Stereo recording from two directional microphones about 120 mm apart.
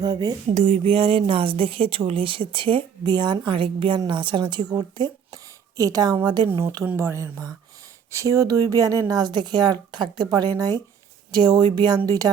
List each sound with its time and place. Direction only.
0.0 s a woman's voice: 35° right (ahead or behind)
6.8 s a woman's voice: 20° right (ahead or behind)